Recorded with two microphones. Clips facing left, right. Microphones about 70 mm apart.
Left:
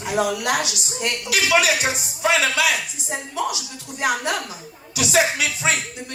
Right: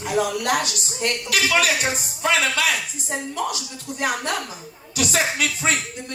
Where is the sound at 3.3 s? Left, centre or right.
Right.